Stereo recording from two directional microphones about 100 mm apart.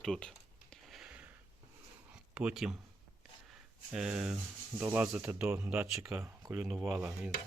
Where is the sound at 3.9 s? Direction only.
10° right (ahead or behind).